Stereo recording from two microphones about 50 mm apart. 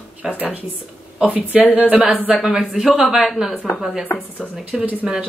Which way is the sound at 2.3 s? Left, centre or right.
Centre.